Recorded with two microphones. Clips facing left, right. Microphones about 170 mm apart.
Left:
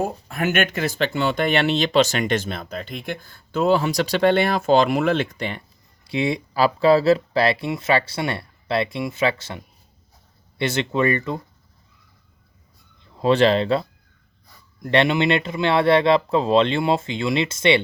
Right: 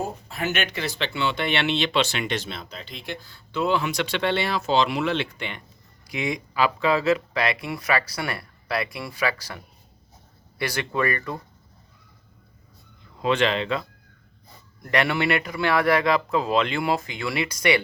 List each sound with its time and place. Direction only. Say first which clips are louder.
0.3 s speech: left 7 dB; 50° left (ahead or behind); by 11.3 s 25° left (ahead or behind)
13.2 s speech: left 6 dB; 35° left (ahead or behind)
14.8 s speech: left 5 dB; 25° left (ahead or behind)